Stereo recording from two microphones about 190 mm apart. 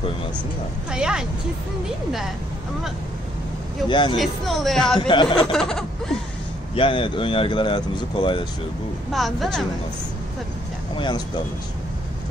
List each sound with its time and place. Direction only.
0.9 s speech: 5° right (ahead or behind)
3.9 s speech: 25° left (ahead or behind)
4.2 s speech: centre (ahead or behind)
5.0 s speech: 25° left (ahead or behind)
5.5 s a sound: centre (ahead or behind)
6.7 s speech: 25° left (ahead or behind)
9.1 s speech: centre (ahead or behind)
11.0 s speech: 25° left (ahead or behind)